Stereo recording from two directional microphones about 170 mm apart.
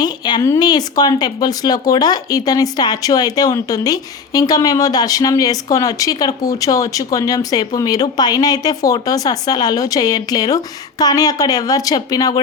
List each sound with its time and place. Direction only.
0.0 s speech: 25° left (ahead or behind)